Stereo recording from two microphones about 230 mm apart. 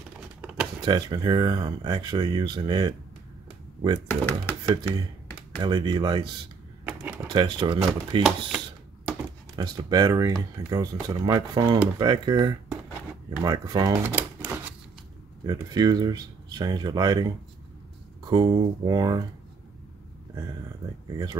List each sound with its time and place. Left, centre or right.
0.4 s a sound: centre
0.8 s speech: centre
4.1 s speech: centre
5.6 s speech: centre
6.9 s a sound: centre
7.2 s speech: right
8.2 s a sound: centre
9.6 s speech: centre
21.1 s speech: centre